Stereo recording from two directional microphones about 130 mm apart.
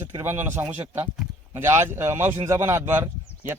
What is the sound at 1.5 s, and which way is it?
Speech, 20° right (ahead or behind).